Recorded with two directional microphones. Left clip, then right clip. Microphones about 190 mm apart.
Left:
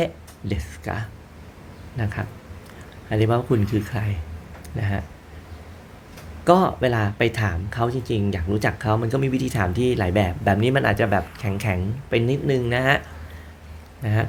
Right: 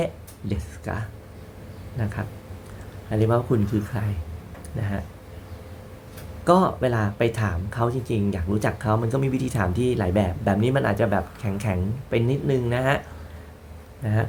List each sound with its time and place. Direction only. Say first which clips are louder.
0.0 s speech: left 2 dB; 10° left (ahead or behind)
6.4 s speech: left 2 dB; 15° left (ahead or behind)
14.0 s speech: left 2 dB; 20° left (ahead or behind)